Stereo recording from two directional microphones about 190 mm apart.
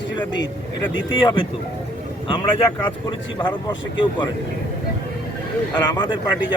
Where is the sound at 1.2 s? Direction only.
25° left (ahead or behind).